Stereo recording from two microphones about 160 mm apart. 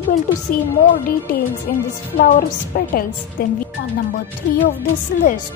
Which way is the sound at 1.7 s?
65° left (ahead or behind).